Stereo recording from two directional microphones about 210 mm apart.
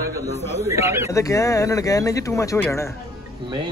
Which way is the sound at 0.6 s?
15° right (ahead or behind).